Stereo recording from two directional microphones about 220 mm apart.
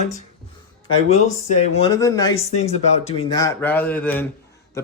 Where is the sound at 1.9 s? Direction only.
15° left (ahead or behind).